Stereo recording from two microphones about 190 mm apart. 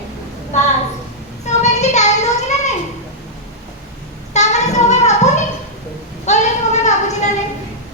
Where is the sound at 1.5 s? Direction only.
35° left (ahead or behind).